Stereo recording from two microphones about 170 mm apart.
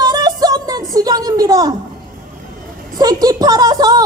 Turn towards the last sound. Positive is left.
turn(degrees=-25)  # may be behind; listen again after turning